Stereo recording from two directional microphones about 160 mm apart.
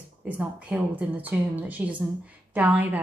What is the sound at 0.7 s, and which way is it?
A woman's voice, 10° right (ahead or behind).